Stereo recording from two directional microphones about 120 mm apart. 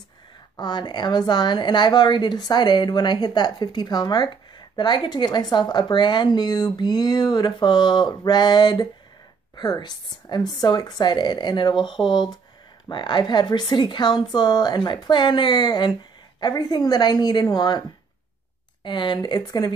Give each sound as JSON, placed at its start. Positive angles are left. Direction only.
{"t": 0.6, "sound": "a woman's voice", "side_deg": 40}